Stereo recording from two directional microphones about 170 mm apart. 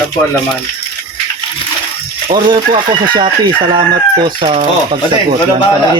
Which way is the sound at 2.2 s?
30° right (ahead or behind).